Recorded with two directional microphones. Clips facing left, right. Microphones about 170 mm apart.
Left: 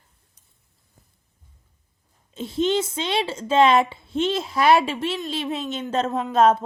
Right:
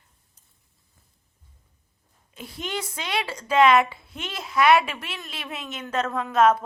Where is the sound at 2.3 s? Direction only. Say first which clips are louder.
Left 11 dB; 25° left (ahead or behind).